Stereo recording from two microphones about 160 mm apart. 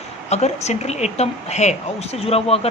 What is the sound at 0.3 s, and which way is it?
A woman's voice, 45° left (ahead or behind).